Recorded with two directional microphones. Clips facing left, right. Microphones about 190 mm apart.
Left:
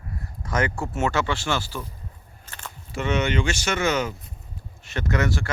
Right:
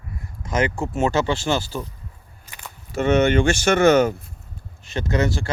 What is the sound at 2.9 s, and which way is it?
Speech, 50° right (ahead or behind).